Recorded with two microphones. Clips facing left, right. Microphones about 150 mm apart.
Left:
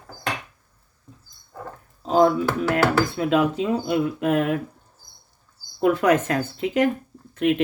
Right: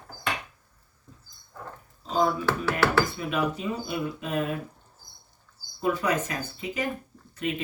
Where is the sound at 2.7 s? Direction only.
80° left.